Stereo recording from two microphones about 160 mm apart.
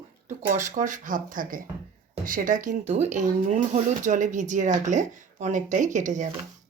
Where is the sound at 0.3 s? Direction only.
50° right (ahead or behind).